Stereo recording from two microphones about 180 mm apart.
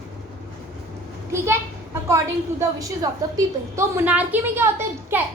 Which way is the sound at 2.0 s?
15° right (ahead or behind).